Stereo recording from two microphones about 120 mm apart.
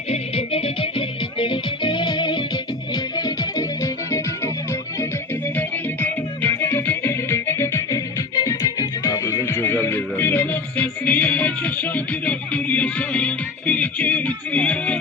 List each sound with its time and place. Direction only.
0.1 s music: 55° left (ahead or behind); by 9.4 s 30° left (ahead or behind)
9.4 s music: 20° left (ahead or behind)